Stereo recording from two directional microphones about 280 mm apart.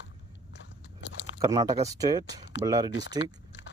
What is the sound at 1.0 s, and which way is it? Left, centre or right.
Biting, left.